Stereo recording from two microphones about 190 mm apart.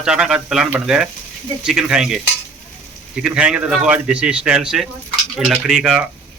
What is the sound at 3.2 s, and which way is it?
Speech, 5° right (ahead or behind).